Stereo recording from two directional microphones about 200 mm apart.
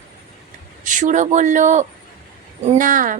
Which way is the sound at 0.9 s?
40° right (ahead or behind).